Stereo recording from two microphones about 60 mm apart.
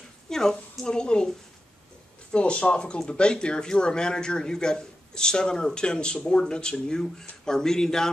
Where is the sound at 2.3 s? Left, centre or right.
Centre.